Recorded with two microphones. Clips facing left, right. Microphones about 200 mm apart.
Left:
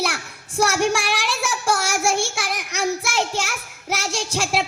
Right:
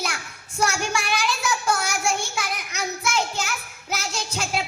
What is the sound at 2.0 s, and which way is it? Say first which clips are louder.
Child singing: left 4 dB; 85° left.